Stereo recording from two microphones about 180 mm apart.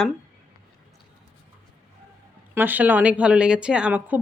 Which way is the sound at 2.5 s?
10° right (ahead or behind).